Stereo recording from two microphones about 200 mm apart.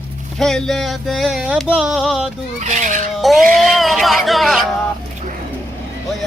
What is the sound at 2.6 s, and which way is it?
Speech, 35° right (ahead or behind).